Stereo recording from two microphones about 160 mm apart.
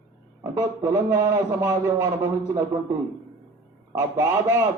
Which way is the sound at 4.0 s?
25° right (ahead or behind).